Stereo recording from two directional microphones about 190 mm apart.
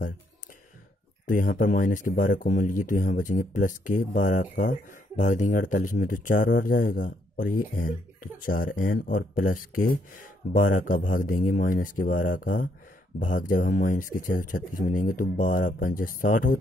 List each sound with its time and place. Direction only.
1.2 s speech: 45° left (ahead or behind)